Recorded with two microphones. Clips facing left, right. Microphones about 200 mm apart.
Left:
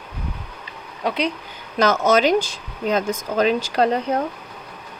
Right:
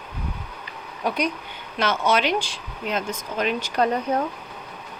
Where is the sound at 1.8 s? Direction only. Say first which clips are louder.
Left 5 dB; 40° left (ahead or behind).